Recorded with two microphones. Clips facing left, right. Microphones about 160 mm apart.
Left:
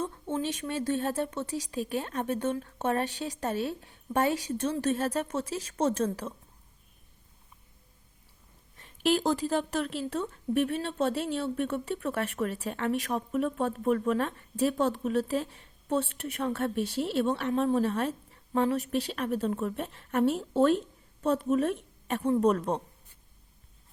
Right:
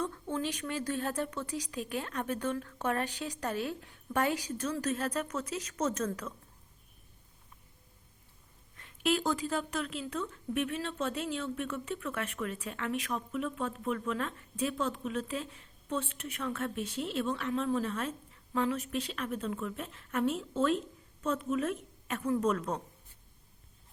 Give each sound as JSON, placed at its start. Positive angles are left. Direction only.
{"t": 0.0, "sound": "speech", "side_deg": 20}
{"t": 9.1, "sound": "speech", "side_deg": 40}